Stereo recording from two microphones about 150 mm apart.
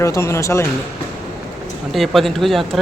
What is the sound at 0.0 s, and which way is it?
Speech, 20° left (ahead or behind).